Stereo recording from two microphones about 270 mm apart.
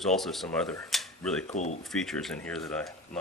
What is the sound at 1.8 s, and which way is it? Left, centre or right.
Speech, centre.